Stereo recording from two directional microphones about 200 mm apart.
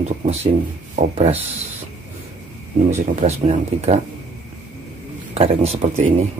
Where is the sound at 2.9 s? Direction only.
35° right (ahead or behind).